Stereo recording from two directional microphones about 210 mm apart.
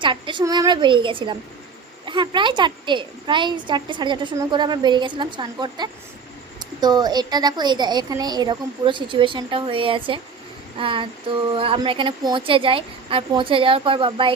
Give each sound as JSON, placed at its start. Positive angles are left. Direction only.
{"t": 0.0, "sound": "a woman's voice", "side_deg": -25}